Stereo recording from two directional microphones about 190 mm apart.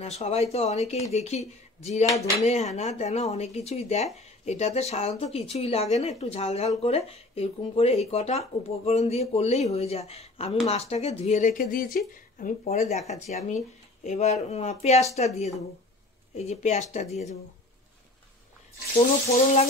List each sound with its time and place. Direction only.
0.0 s speech: 35° left (ahead or behind)